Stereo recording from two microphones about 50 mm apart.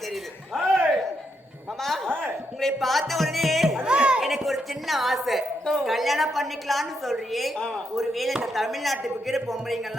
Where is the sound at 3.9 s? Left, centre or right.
Right.